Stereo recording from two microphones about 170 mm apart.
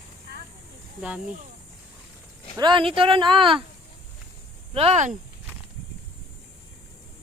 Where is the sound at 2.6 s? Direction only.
30° right (ahead or behind).